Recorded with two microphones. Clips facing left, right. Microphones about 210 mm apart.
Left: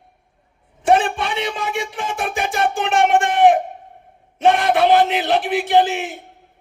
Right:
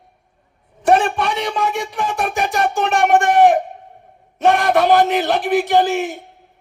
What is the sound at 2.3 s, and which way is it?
Music, 40° right (ahead or behind).